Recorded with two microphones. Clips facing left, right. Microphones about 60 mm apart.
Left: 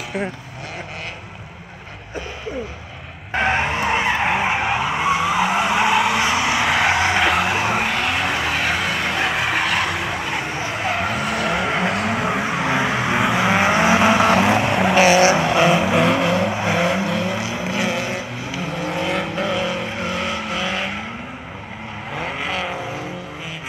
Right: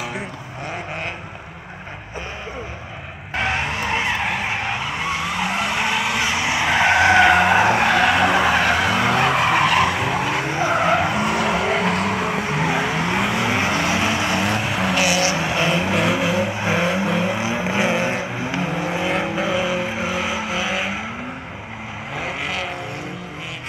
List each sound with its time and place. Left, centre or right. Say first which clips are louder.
3.3 s vehicle: left 3 dB; centre
4.0 s skidding: left 3 dB; centre
10.8 s vehicle: right 2 dB; centre
13.6 s vehicle: left 5 dB; centre
14.4 s vehicle: left 4 dB; centre
15.0 s vehicle: left 8 dB; left
15.4 s vehicle: left 4 dB; centre; by 18.2 s right
18.6 s vehicle: even; centre
22.1 s vehicle: left 1 dB; centre